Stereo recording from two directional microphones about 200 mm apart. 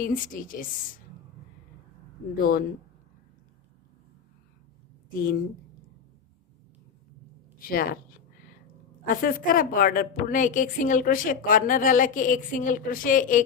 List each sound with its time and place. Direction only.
0.0 s a woman's voice: 45° left (ahead or behind)
2.4 s a woman's voice: 45° left (ahead or behind)
7.6 s a woman's voice: 45° left (ahead or behind)
9.2 s a woman's voice: 45° left (ahead or behind)